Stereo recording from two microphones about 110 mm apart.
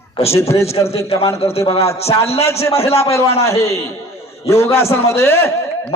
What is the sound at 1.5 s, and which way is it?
A man's voice, 65° left (ahead or behind).